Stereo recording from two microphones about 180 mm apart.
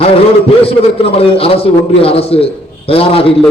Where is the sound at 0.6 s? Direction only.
30° left (ahead or behind).